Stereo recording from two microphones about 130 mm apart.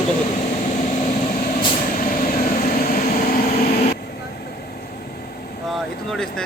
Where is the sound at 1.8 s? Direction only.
90° left.